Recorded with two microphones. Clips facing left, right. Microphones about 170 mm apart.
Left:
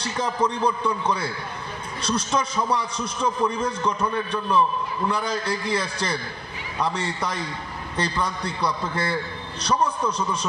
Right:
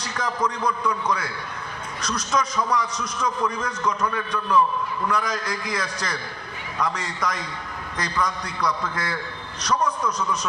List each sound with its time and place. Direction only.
0.0 s a man's voice: 30° left (ahead or behind)